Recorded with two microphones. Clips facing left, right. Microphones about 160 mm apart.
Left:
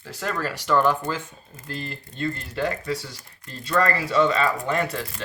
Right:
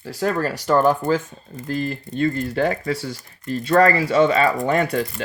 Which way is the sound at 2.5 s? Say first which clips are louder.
Right 5 dB; 65° right (ahead or behind).